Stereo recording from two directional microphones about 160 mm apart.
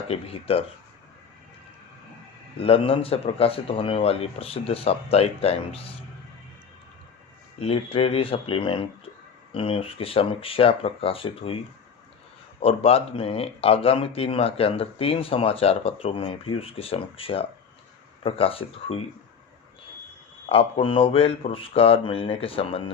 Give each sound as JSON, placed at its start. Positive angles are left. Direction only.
{"t": 0.1, "sound": "speech", "side_deg": 35}
{"t": 2.6, "sound": "speech", "side_deg": 35}
{"t": 7.6, "sound": "speech", "side_deg": 35}
{"t": 12.6, "sound": "speech", "side_deg": 35}
{"t": 20.5, "sound": "speech", "side_deg": 35}